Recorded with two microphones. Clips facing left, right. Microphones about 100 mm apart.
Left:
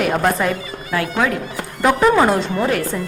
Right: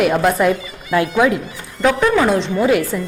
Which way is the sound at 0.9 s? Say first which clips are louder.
Right 5 dB; 15° right (ahead or behind).